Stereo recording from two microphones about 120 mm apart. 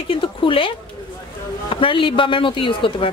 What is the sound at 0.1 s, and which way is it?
A woman's voice, 45° left (ahead or behind).